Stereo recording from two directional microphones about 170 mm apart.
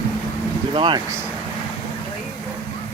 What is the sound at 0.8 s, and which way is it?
Speech, 25° right (ahead or behind).